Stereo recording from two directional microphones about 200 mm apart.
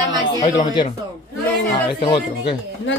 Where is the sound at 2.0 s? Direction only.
25° left (ahead or behind).